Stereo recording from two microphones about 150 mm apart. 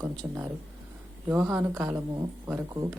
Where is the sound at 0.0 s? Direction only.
20° right (ahead or behind).